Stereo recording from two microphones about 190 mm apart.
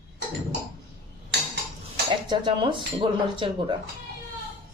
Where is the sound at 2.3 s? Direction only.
25° right (ahead or behind).